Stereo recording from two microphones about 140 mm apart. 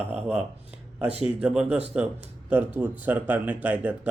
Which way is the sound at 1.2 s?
5° right (ahead or behind).